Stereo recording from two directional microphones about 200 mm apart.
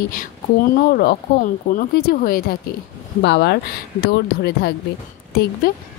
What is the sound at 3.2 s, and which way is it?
A woman's voice, 60° left (ahead or behind).